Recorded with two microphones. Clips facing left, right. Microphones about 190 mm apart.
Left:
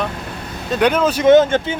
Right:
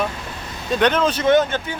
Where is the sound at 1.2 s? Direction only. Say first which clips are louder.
Left 8 dB; 25° left (ahead or behind).